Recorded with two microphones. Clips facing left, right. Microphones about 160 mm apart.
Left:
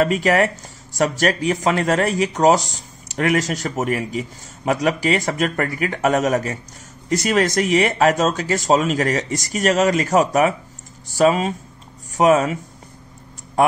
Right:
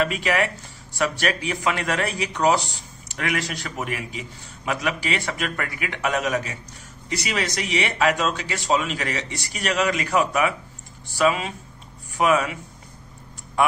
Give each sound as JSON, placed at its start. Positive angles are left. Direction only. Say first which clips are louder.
{"t": 0.0, "sound": "speech", "louder": "left 6 dB", "side_deg": 40}
{"t": 13.6, "sound": "speech", "louder": "left 4 dB", "side_deg": 40}